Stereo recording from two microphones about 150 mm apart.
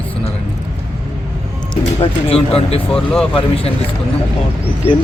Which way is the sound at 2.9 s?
5° left (ahead or behind).